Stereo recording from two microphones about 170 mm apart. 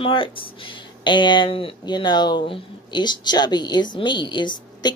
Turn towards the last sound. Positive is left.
turn(degrees=25)  # may be behind; listen again after turning